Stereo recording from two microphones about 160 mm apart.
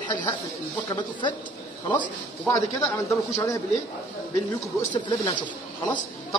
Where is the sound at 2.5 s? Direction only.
20° left (ahead or behind).